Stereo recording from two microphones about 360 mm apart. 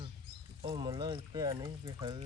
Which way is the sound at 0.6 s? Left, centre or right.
Centre.